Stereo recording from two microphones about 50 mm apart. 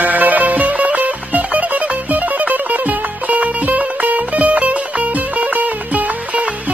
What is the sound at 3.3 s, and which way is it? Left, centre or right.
Music, right.